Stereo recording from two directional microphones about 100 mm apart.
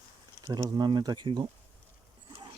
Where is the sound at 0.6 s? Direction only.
40° right (ahead or behind).